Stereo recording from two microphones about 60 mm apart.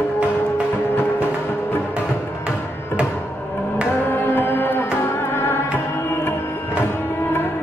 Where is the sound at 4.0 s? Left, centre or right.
Left.